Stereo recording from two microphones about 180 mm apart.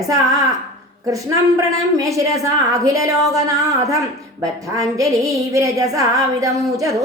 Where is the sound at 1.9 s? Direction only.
15° right (ahead or behind).